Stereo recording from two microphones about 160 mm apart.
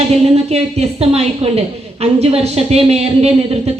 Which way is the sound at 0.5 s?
40° right (ahead or behind).